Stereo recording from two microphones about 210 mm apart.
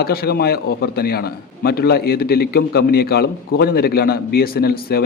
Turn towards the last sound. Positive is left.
turn(degrees=45)  # may be behind; listen again after turning